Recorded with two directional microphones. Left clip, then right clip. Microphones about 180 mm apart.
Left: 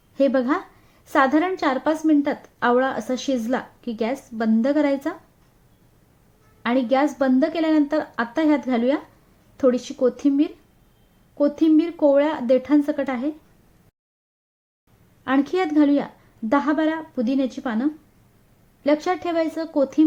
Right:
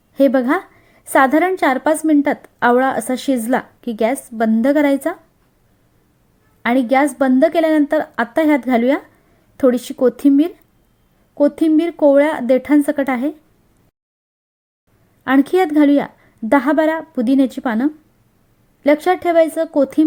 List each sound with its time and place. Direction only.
0.1 s a woman's voice: 30° right (ahead or behind)
6.6 s a woman's voice: 30° right (ahead or behind)
15.2 s a woman's voice: 30° right (ahead or behind)